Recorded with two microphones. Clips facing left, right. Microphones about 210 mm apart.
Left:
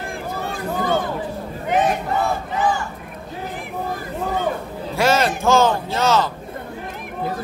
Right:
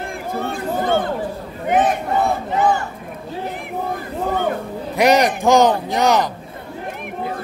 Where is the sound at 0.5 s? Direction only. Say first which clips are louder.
Right 2 dB; 55° right (ahead or behind).